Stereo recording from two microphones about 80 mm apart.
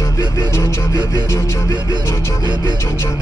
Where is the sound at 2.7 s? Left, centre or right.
Left.